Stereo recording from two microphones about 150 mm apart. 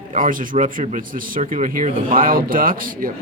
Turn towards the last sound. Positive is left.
turn(degrees=-70)  # may be behind; listen again after turning